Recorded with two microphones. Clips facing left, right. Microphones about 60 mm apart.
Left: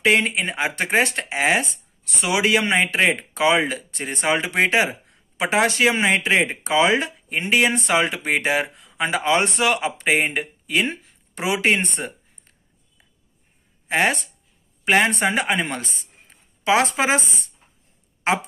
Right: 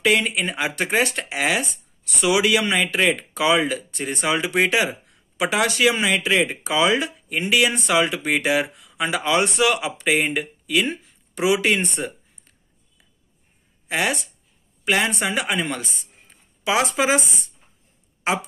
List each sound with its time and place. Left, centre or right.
0.0 s speech: left